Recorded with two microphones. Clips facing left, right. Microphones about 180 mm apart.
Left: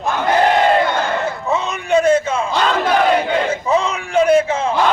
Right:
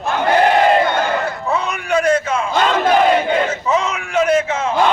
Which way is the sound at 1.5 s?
25° left (ahead or behind).